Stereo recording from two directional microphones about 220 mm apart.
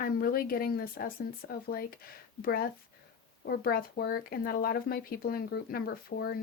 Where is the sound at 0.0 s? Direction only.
40° left (ahead or behind).